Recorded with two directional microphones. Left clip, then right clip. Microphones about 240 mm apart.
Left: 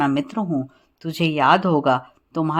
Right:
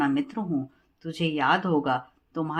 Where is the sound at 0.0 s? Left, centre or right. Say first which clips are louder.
Left 5 dB; left.